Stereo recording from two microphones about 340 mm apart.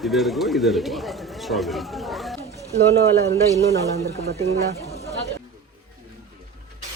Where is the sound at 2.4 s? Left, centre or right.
Centre.